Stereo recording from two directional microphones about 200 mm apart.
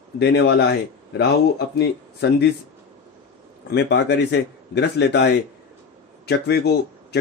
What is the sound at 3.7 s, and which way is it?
Speech, 55° left (ahead or behind).